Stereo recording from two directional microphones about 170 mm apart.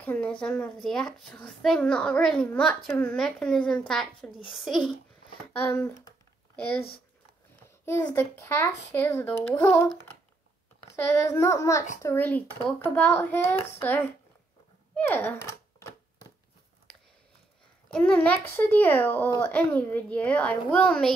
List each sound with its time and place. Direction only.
0.0 s a woman's voice: 10° left (ahead or behind)
5.6 s a child's voice: 15° left (ahead or behind)
7.8 s a child's voice: 15° left (ahead or behind)
10.9 s a child's voice: 15° left (ahead or behind)
15.0 s a sound: 10° left (ahead or behind)
17.9 s a child's voice: 5° left (ahead or behind)